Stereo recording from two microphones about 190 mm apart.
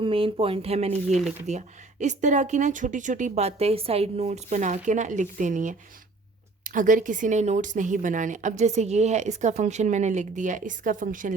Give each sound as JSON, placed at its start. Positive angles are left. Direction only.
{"t": 0.0, "sound": "speech", "side_deg": -30}